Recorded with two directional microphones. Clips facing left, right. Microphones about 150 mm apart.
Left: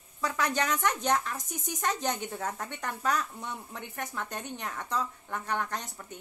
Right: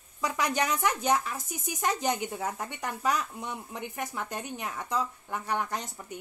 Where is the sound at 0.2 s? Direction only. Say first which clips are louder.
Right 1 dB; 15° right (ahead or behind).